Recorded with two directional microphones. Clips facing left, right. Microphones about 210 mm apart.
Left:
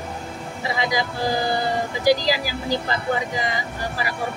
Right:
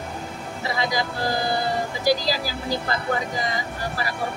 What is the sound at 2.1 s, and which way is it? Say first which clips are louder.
Speech: left 3 dB; 15° left (ahead or behind).